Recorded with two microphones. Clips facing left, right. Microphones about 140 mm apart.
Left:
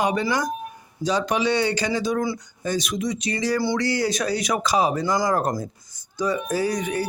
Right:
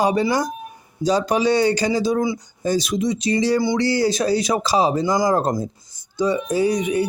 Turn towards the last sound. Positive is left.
turn(degrees=-20)  # may be behind; listen again after turning